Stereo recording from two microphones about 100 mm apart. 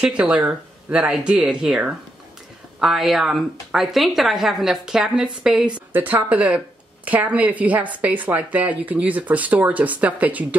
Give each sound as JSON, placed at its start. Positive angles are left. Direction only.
{"t": 0.0, "sound": "speech", "side_deg": -10}
{"t": 2.8, "sound": "a woman's voice", "side_deg": -5}